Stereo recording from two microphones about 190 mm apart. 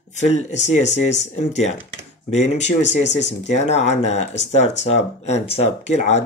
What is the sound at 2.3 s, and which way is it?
Speech, 35° left (ahead or behind).